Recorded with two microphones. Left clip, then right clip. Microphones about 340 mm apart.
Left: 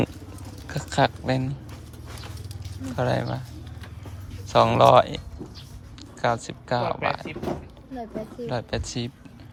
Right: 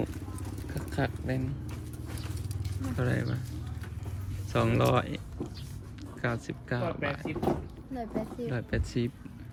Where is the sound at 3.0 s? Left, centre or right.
Centre.